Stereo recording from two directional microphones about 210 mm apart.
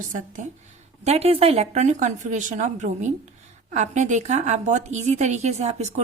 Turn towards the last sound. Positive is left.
turn(degrees=-30)  # may be behind; listen again after turning